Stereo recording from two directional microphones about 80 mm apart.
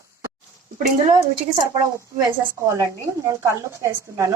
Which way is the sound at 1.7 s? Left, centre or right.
Right.